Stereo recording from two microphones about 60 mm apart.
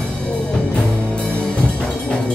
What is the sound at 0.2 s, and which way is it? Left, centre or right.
Music, centre.